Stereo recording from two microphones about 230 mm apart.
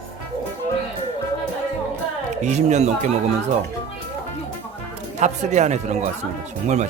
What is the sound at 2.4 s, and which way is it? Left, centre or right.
Speech, right.